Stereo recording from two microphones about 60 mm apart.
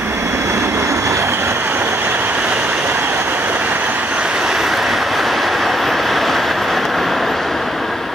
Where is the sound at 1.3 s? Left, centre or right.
Right.